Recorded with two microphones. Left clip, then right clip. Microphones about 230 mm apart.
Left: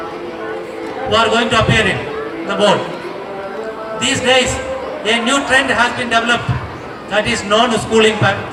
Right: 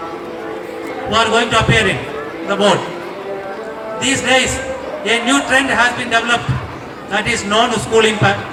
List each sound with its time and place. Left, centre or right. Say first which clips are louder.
1.1 s speech: even; left
4.0 s speech: left 1 dB; left